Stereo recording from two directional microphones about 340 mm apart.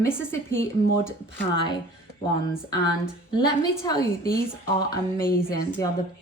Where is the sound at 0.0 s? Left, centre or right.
Centre.